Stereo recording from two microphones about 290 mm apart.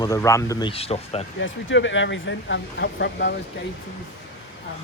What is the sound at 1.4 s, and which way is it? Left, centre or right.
Speech, left.